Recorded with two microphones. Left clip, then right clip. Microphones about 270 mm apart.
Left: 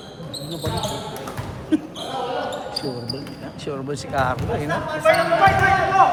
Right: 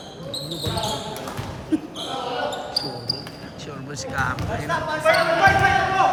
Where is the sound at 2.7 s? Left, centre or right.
Left.